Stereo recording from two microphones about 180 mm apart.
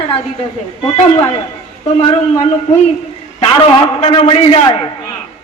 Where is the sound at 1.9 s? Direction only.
30° left (ahead or behind).